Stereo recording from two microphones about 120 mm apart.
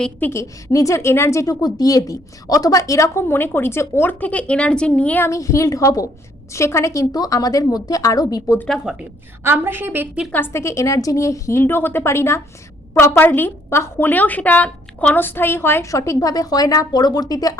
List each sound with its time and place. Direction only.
0.0 s a woman's voice: 15° left (ahead or behind)
5.3 s a woman's voice: 25° left (ahead or behind)
8.6 s speech: centre (ahead or behind)
9.4 s a woman's voice: 20° right (ahead or behind)
10.3 s a woman's voice: 20° left (ahead or behind)